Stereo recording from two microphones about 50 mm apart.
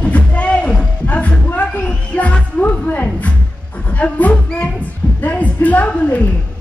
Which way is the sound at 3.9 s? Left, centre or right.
Left.